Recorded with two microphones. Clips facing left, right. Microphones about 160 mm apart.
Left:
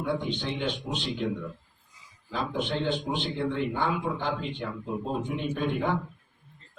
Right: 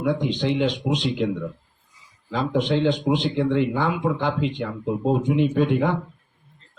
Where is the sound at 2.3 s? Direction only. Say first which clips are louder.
Right 8 dB; 90° right.